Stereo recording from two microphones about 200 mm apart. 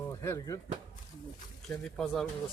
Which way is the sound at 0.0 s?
15° left (ahead or behind).